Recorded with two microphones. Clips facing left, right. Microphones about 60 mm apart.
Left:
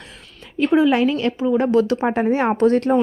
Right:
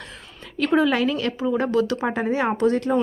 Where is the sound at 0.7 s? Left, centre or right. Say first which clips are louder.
Left 3 dB; centre.